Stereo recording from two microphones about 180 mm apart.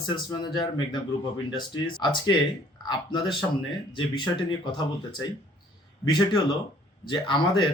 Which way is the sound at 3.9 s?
25° left (ahead or behind).